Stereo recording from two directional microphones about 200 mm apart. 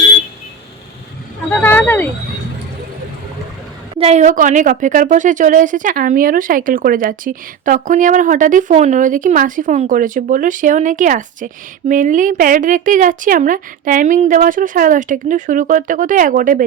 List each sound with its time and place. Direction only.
1.5 s vehicle: 10° left (ahead or behind)
3.9 s a woman's voice: 30° right (ahead or behind)